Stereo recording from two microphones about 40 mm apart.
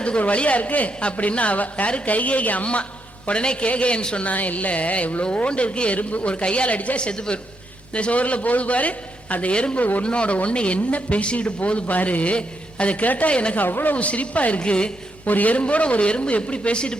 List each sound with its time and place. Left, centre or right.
0.2 s a man's voice: left
3.2 s a man's voice: left
7.1 s a woman's voice: left
9.7 s a man's voice: left
10.0 s a man's voice: left
13.6 s speech: left
13.9 s a man's voice: left
14.6 s a woman's voice: left
15.3 s a man's voice: left